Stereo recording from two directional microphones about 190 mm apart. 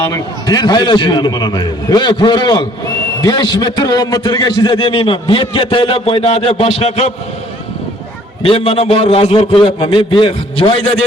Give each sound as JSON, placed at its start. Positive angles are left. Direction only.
{"t": 0.0, "sound": "a man's voice", "side_deg": 20}
{"t": 8.4, "sound": "a man's voice", "side_deg": 30}